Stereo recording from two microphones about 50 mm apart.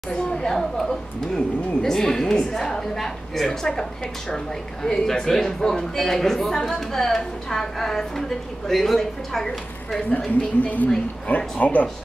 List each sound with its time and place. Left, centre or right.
0.1 s speech: centre
4.8 s a woman's voice: centre
10.6 s a woman's voice: left